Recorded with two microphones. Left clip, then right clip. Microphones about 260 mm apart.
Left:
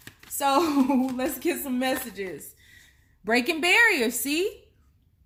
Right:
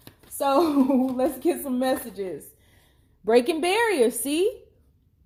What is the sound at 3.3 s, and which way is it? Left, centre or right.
A woman's voice, left.